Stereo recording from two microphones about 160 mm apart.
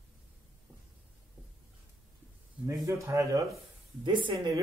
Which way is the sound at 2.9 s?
20° right (ahead or behind).